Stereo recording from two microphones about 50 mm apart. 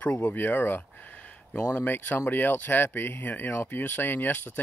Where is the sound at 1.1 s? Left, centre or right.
Left.